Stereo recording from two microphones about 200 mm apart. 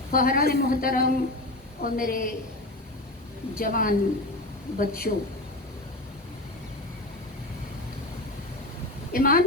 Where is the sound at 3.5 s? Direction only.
45° left (ahead or behind).